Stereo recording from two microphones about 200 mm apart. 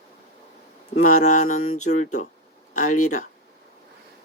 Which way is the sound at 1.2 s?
35° left (ahead or behind).